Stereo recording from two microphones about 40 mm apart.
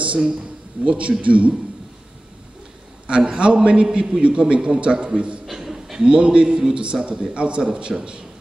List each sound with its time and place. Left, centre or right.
0.4 s a man's voice: right
3.1 s a man's voice: right
5.5 s a sound: centre
6.0 s a man's voice: right